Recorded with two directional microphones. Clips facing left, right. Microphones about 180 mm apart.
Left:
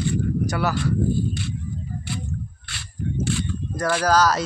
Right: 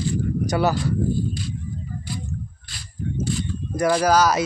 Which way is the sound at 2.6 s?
75° left (ahead or behind).